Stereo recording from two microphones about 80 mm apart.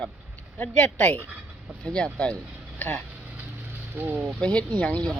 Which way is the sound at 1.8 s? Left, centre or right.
Centre.